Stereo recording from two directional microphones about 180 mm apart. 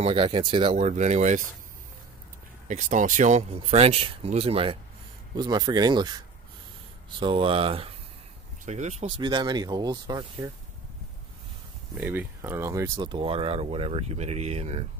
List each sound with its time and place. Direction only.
0.0 s speech: 30° right (ahead or behind)
2.7 s speech: 45° right (ahead or behind)
9.2 s speech: 25° right (ahead or behind)
12.0 s speech: 10° right (ahead or behind); by 14.9 s 35° right (ahead or behind)